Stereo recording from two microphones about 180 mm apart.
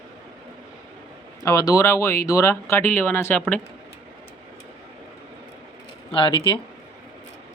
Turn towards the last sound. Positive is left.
turn(degrees=25)  # may be behind; listen again after turning